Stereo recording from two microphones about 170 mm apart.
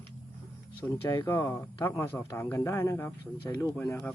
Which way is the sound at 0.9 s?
15° left (ahead or behind).